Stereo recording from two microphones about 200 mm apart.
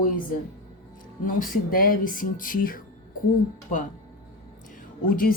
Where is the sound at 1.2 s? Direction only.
45° left (ahead or behind).